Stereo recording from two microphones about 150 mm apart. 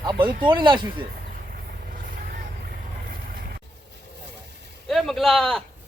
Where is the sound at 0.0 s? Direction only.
30° right (ahead or behind).